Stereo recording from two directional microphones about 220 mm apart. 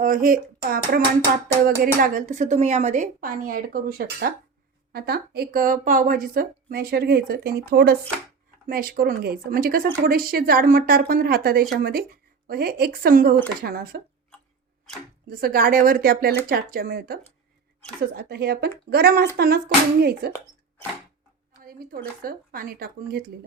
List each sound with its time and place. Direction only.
0.0 s a woman's voice: 40° right (ahead or behind)
15.3 s a woman's voice: 45° right (ahead or behind)
18.2 s a woman's voice: 45° right (ahead or behind)
21.6 s a sound: 40° right (ahead or behind)
22.2 s a woman's voice: 40° right (ahead or behind)